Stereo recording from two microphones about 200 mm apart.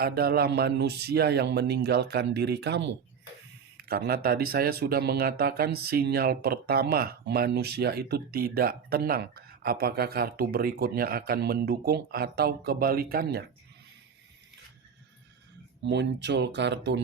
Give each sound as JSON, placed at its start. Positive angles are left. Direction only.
{"t": 0.0, "sound": "a man's voice", "side_deg": -50}
{"t": 15.8, "sound": "a man's voice", "side_deg": -60}